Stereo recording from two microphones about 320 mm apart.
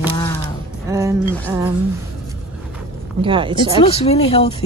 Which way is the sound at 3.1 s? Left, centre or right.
Centre.